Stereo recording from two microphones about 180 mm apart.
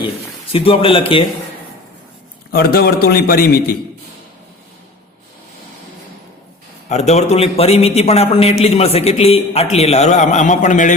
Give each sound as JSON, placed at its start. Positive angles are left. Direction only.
{"t": 0.5, "sound": "a man's voice", "side_deg": 30}
{"t": 2.5, "sound": "a man's voice", "side_deg": 60}
{"t": 6.8, "sound": "a man's voice", "side_deg": 40}